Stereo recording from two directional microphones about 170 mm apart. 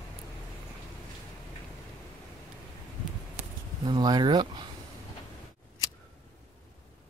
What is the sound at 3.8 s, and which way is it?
Speech, 25° right (ahead or behind).